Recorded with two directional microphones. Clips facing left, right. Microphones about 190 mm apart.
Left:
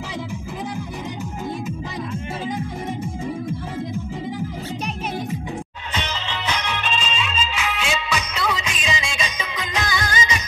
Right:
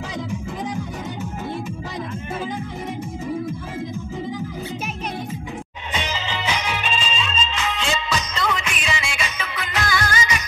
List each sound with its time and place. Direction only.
6.0 s music: 5° right (ahead or behind); by 10.4 s 20° left (ahead or behind)